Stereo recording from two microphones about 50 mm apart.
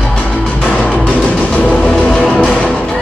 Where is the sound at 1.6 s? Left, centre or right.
Left.